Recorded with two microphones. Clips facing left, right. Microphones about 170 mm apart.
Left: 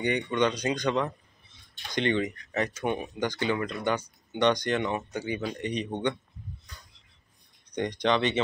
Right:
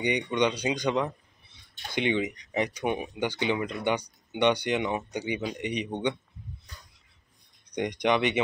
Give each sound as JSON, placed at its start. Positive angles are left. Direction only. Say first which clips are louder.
{"t": 0.0, "sound": "speech", "louder": "even", "side_deg": -15}
{"t": 7.7, "sound": "speech", "louder": "even", "side_deg": -15}